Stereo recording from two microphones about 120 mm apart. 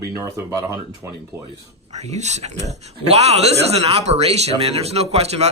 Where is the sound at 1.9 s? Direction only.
70° right (ahead or behind).